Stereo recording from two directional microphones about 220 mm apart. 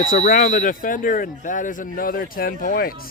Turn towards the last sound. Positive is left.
turn(degrees=40)  # may be behind; listen again after turning